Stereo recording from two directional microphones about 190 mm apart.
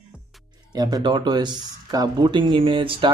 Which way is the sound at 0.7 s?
20° right (ahead or behind).